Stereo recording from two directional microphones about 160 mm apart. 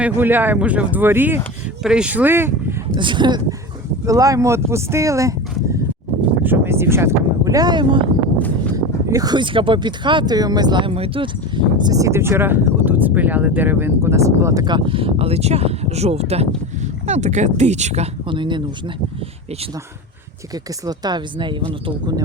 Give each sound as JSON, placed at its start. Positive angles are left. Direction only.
{"t": 0.0, "sound": "speech", "side_deg": -10}
{"t": 3.0, "sound": "speech", "side_deg": -30}
{"t": 6.4, "sound": "speech", "side_deg": -15}
{"t": 20.8, "sound": "speech", "side_deg": -25}